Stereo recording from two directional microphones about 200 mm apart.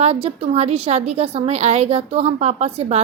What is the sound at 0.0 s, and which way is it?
Speech, 30° right (ahead or behind).